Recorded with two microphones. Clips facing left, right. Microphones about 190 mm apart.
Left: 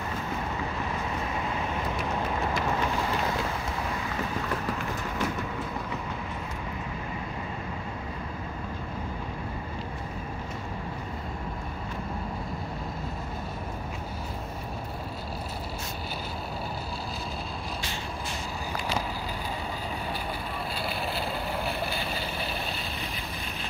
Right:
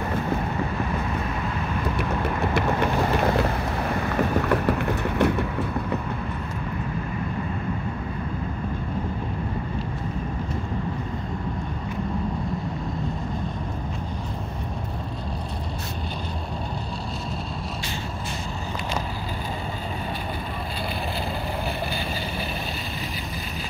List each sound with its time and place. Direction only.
2.0 s vehicle: 65° right (ahead or behind)